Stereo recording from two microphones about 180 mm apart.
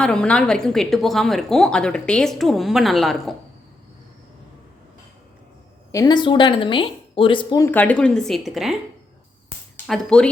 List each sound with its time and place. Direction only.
0.0 s a woman's voice: 5° left (ahead or behind)
5.9 s speech: 20° left (ahead or behind)
7.6 s a woman's voice: 10° left (ahead or behind)
9.8 s speech: 5° left (ahead or behind)